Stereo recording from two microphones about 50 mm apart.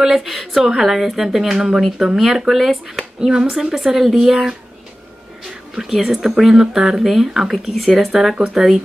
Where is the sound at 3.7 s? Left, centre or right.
Centre.